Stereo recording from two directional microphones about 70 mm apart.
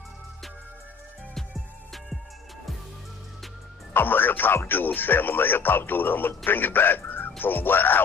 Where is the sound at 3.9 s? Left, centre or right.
Left.